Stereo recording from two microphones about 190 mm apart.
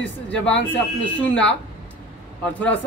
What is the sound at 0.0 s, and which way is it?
Speech, 5° left (ahead or behind).